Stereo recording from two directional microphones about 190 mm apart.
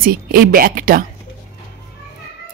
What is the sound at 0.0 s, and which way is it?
Speech, 50° right (ahead or behind).